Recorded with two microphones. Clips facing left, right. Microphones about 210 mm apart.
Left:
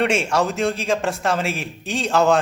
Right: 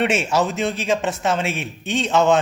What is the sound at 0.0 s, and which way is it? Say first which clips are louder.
Speech: even; 5° right (ahead or behind).